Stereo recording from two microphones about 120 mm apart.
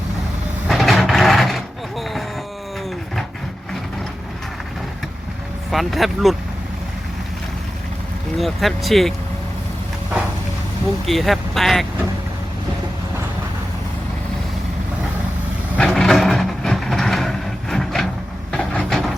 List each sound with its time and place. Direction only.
0.7 s vehicle: centre (ahead or behind)
5.7 s speech: centre (ahead or behind)
8.4 s speech: centre (ahead or behind)
11.0 s speech: centre (ahead or behind)
15.8 s vehicle: 5° left (ahead or behind)
18.5 s a sound: 10° left (ahead or behind)